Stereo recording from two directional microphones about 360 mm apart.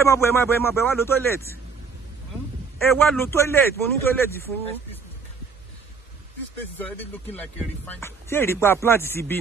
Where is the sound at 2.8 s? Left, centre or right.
Centre.